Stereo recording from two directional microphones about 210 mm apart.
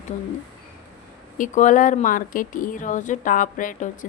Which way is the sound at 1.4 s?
40° left (ahead or behind).